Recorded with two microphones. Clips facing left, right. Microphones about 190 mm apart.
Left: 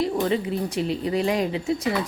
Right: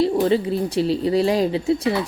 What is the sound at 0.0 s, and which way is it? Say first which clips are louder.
A woman's voice: right 5 dB; 30° right (ahead or behind).